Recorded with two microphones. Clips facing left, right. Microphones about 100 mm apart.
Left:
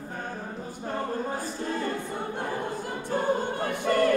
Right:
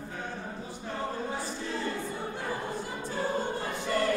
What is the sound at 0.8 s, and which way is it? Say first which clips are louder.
Choir: left 4 dB; 45° left (ahead or behind).